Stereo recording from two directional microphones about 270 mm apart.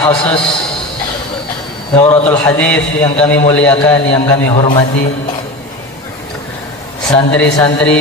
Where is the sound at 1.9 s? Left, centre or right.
Centre.